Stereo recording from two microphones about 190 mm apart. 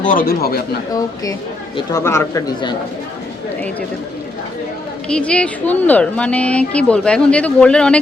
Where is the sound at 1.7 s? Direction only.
15° left (ahead or behind).